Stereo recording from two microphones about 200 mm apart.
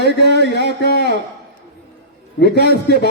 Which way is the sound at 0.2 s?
55° left (ahead or behind).